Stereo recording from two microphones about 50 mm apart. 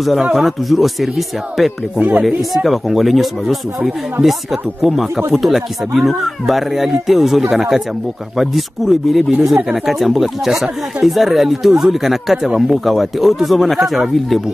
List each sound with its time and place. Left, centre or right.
0.3 s speech: centre
2.0 s speech: right
2.2 s speech: centre